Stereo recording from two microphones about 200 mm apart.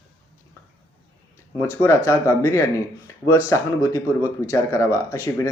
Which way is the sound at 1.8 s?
15° left (ahead or behind).